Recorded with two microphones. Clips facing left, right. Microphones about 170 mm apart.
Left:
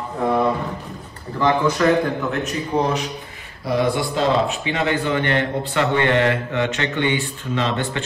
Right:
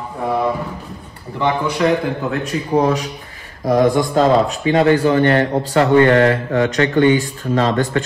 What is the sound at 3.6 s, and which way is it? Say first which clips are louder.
A man's voice: right 6 dB; 45° right (ahead or behind).